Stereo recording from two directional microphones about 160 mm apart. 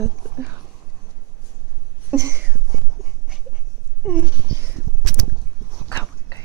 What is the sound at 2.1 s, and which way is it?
Speech, 20° right (ahead or behind).